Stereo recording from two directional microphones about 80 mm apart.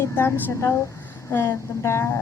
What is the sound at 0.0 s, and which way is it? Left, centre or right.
A woman's voice, left.